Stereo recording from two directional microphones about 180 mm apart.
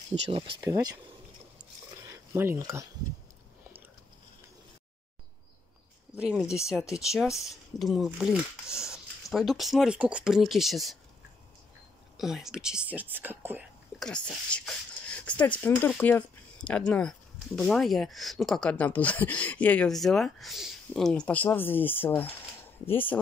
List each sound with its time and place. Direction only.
0.1 s speech: 30° right (ahead or behind)
2.3 s speech: 15° right (ahead or behind)
6.1 s speech: 5° right (ahead or behind)
12.2 s speech: centre (ahead or behind)
13.9 s speech: 5° left (ahead or behind)
15.0 s a sound: 5° left (ahead or behind)
15.6 s speech: 10° left (ahead or behind)